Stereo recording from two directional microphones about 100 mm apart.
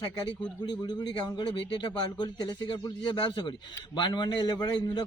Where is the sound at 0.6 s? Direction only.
45° left (ahead or behind).